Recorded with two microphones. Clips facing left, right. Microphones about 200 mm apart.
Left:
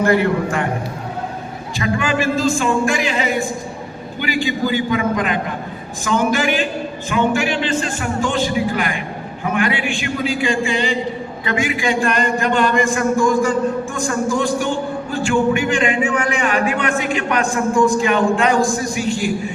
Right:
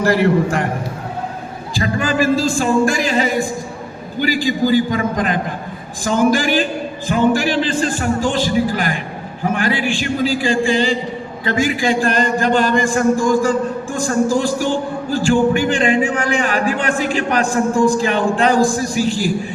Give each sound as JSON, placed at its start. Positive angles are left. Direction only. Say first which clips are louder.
{"t": 1.7, "sound": "speech", "louder": "right 1 dB", "side_deg": -35}